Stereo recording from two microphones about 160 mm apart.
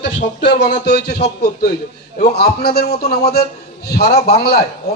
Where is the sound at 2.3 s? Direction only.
80° left.